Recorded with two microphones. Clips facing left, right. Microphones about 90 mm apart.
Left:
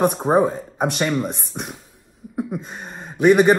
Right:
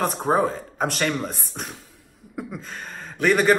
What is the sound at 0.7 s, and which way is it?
Speech, 15° left (ahead or behind).